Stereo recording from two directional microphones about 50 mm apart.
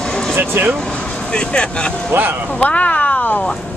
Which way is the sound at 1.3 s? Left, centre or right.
Centre.